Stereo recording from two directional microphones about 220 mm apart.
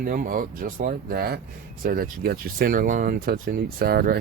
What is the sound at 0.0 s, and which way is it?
Speech, 40° right (ahead or behind).